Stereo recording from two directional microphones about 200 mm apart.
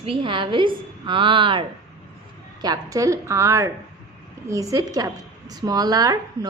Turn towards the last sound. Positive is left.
turn(degrees=-20)  # may be behind; listen again after turning